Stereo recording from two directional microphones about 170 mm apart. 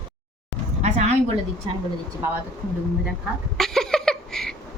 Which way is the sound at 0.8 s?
40° right (ahead or behind).